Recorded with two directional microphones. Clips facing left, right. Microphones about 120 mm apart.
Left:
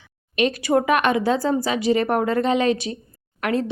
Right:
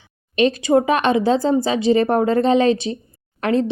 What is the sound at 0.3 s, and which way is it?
Speech, 30° right (ahead or behind).